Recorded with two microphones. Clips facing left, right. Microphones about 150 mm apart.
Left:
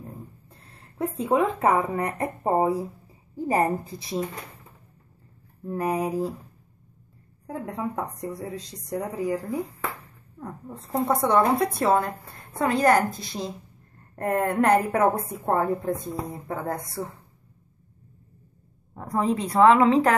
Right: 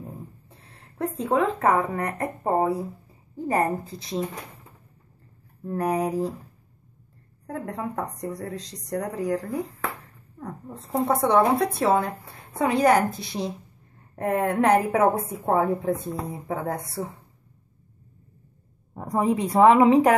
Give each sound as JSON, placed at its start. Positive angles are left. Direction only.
{"t": 0.0, "sound": "a sound", "side_deg": 0}
{"t": 1.3, "sound": "speech", "side_deg": 15}
{"t": 5.7, "sound": "a woman's voice", "side_deg": 0}
{"t": 7.4, "sound": "a woman's voice", "side_deg": 0}
{"t": 18.9, "sound": "a woman's voice", "side_deg": -15}